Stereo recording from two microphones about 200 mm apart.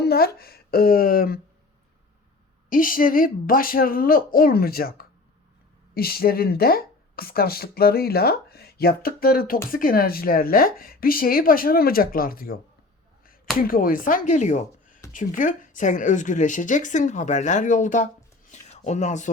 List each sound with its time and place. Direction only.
0.0 s a woman's voice: 50° left (ahead or behind)
2.6 s a woman's voice: 45° left (ahead or behind)
13.6 s a woman's voice: 45° left (ahead or behind)
18.5 s a sound: 35° left (ahead or behind)